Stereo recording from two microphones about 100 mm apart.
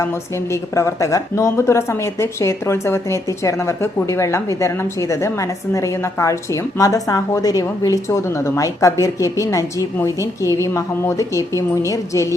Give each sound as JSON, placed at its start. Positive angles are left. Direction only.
{"t": 0.5, "sound": "a woman's voice", "side_deg": 30}